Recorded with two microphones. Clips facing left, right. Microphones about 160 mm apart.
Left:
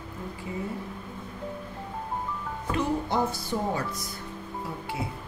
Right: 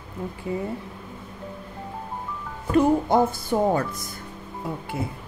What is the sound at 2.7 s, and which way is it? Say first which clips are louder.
Speech: right 9 dB; 50° right (ahead or behind).